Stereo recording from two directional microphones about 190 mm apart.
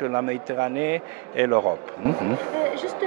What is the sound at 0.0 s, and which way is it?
A man's voice, 15° right (ahead or behind).